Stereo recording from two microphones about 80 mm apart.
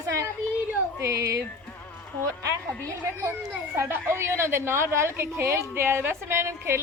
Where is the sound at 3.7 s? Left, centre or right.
Right.